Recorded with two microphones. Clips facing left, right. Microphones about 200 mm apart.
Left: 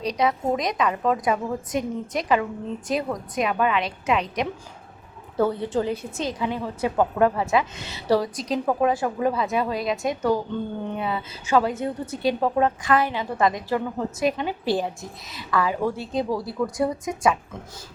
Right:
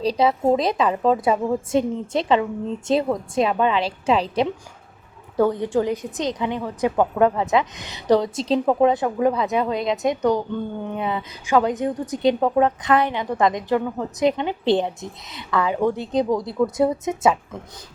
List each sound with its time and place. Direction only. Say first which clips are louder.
0.0 s a woman's voice: right 4 dB; 30° right (ahead or behind)
5.4 s a woman's voice: right 3 dB; 15° right (ahead or behind)